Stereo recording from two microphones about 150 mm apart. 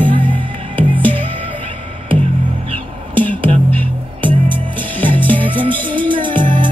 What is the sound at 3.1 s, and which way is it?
Music, 10° left (ahead or behind).